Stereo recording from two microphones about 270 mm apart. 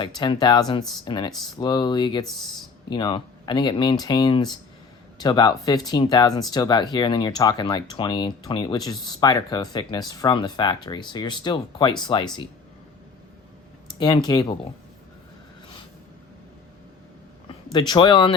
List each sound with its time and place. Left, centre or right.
0.0 s speech: centre
2.2 s speech: centre
2.9 s speech: centre
14.3 s speech: centre
17.7 s speech: centre